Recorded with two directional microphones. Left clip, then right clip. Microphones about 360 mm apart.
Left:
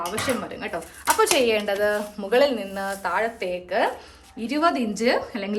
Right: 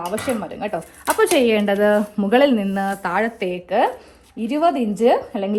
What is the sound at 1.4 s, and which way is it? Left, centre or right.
A woman's voice, centre.